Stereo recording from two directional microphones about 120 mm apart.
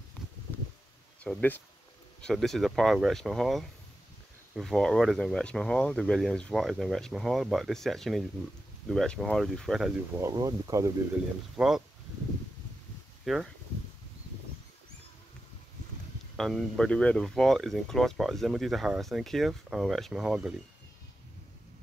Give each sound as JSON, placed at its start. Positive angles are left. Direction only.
{"t": 1.2, "sound": "speech", "side_deg": 10}
{"t": 10.3, "sound": "speech", "side_deg": -35}
{"t": 11.5, "sound": "speech", "side_deg": -5}
{"t": 13.2, "sound": "speech", "side_deg": -5}
{"t": 16.3, "sound": "speech", "side_deg": 5}